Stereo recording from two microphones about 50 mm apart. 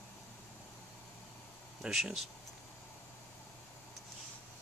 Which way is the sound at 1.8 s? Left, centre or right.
Centre.